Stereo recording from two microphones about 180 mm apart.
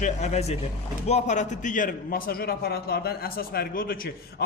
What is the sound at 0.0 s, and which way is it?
A man's voice, 40° left (ahead or behind).